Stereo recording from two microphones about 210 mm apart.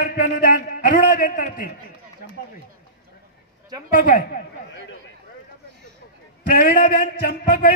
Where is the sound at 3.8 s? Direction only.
40° left (ahead or behind).